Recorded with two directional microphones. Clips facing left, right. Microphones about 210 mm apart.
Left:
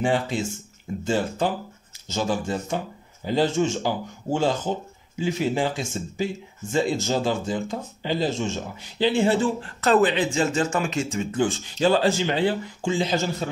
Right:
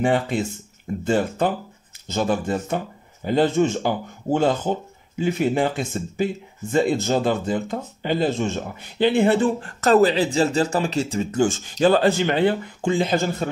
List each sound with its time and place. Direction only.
0.0 s speech: 55° right (ahead or behind)